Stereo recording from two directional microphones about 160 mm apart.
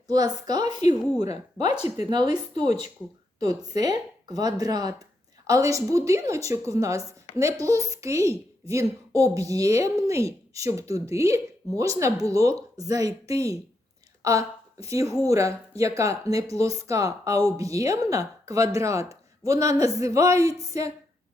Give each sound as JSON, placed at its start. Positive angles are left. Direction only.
{"t": 0.1, "sound": "a woman's voice", "side_deg": -25}
{"t": 2.0, "sound": "a woman's voice", "side_deg": -25}